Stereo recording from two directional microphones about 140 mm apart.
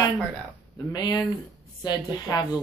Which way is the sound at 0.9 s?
30° left (ahead or behind).